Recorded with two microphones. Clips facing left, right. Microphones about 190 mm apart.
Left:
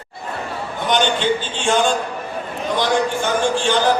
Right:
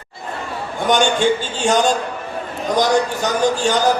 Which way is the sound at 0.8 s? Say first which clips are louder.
Right 3 dB; 45° right (ahead or behind).